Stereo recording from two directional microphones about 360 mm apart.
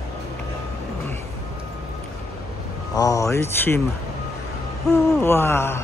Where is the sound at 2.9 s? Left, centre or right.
Centre.